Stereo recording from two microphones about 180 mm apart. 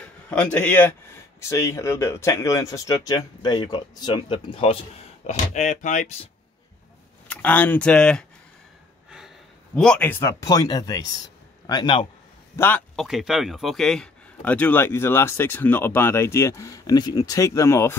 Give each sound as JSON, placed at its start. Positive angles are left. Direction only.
{"t": 0.0, "sound": "a man's voice", "side_deg": 5}
{"t": 5.2, "sound": "speech", "side_deg": 40}
{"t": 7.2, "sound": "speech", "side_deg": 10}
{"t": 9.8, "sound": "speech", "side_deg": 5}
{"t": 12.5, "sound": "speech", "side_deg": 10}
{"t": 12.9, "sound": "speech", "side_deg": 0}